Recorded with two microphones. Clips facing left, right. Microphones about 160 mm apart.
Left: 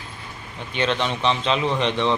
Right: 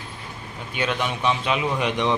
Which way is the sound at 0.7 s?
10° right (ahead or behind).